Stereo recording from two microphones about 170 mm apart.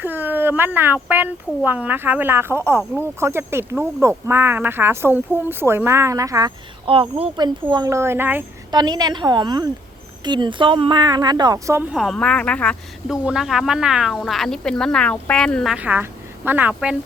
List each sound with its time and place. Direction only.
0.0 s speech: 10° right (ahead or behind)
6.8 s speech: 30° right (ahead or behind); by 8.4 s 10° right (ahead or behind)
8.7 s speech: 25° right (ahead or behind); by 13.1 s 5° left (ahead or behind)
13.2 s speech: 5° right (ahead or behind)